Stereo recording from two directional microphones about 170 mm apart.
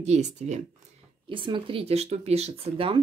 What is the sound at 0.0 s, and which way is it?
Speech, 40° right (ahead or behind).